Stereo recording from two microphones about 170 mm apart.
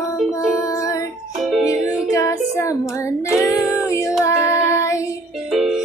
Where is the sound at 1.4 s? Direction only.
Centre (ahead or behind).